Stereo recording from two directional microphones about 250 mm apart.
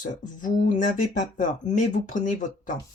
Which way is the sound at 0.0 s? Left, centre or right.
Left.